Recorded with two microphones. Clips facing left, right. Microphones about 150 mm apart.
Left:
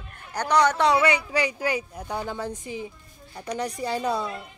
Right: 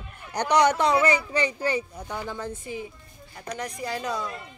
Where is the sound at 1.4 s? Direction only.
10° left (ahead or behind).